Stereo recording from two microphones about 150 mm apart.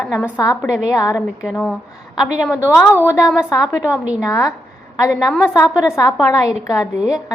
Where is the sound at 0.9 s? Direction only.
20° left (ahead or behind).